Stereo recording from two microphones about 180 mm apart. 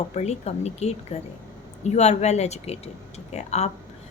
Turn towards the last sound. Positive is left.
turn(degrees=40)  # may be behind; listen again after turning